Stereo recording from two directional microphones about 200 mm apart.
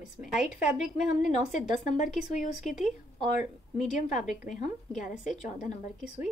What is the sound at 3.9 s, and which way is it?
A woman's voice, 40° left (ahead or behind).